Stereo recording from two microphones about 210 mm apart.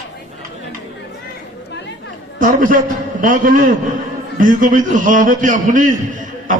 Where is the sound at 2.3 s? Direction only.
40° right (ahead or behind).